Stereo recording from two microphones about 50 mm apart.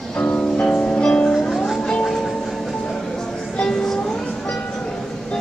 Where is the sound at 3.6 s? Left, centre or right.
Centre.